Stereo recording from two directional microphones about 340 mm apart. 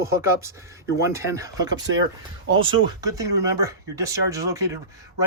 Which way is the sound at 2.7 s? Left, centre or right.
Centre.